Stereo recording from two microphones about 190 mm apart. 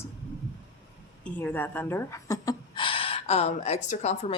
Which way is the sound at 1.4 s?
10° left (ahead or behind).